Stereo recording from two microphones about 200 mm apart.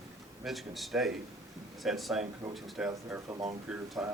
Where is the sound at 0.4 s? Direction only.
Centre (ahead or behind).